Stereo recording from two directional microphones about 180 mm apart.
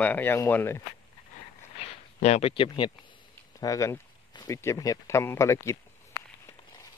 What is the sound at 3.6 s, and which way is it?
Speech, 15° left (ahead or behind).